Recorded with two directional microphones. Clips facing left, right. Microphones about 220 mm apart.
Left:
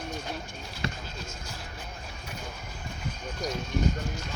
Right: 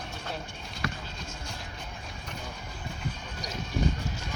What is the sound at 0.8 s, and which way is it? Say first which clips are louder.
Basketball bounce: even; 25° left (ahead or behind).